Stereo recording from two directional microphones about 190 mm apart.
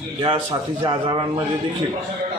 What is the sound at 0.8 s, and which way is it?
Speech, 25° right (ahead or behind).